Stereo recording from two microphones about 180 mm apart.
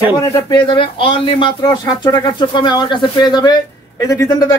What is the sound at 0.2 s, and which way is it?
Speech, 20° left (ahead or behind).